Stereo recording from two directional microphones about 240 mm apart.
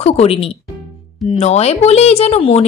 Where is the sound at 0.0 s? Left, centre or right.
Left.